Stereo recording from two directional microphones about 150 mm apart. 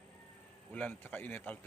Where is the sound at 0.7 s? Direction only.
10° left (ahead or behind).